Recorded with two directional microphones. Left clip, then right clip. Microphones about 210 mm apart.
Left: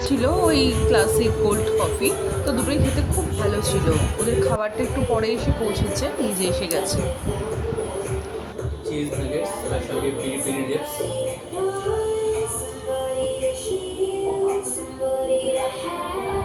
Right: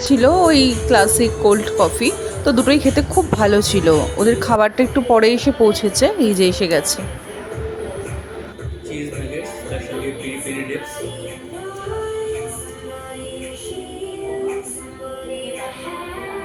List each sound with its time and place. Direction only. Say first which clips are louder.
0.1 s speech: right 8 dB; 30° right (ahead or behind)